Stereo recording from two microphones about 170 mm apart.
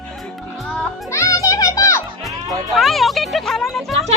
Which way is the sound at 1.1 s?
15° left (ahead or behind).